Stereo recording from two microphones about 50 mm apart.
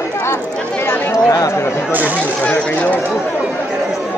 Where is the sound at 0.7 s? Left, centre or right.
Left.